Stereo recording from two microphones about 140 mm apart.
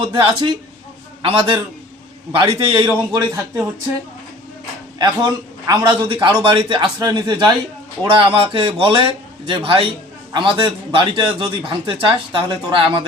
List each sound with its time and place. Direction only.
0.0 s a man's voice: 35° right (ahead or behind)
4.9 s a man's voice: 30° right (ahead or behind)